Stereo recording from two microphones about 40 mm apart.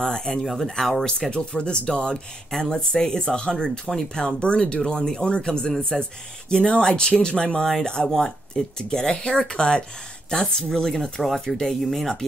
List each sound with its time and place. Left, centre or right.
0.0 s speech: centre
0.4 s speech: centre
1.3 s speech: left; by 12.3 s centre